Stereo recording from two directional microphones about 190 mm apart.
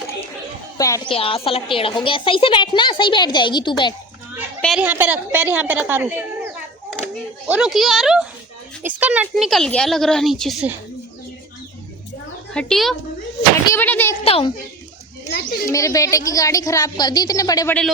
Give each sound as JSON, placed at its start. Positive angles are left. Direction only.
{"t": 0.8, "sound": "a woman's voice", "side_deg": 15}
{"t": 1.1, "sound": "a woman's voice", "side_deg": 30}
{"t": 4.8, "sound": "a woman's voice", "side_deg": -10}
{"t": 7.4, "sound": "speech", "side_deg": -5}
{"t": 12.5, "sound": "a woman's voice", "side_deg": 0}
{"t": 14.3, "sound": "a child's voice", "side_deg": 30}
{"t": 15.3, "sound": "a child's voice", "side_deg": 45}
{"t": 15.7, "sound": "a woman's voice", "side_deg": 15}